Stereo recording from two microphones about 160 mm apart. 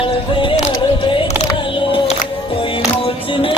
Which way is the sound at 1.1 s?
30° left (ahead or behind).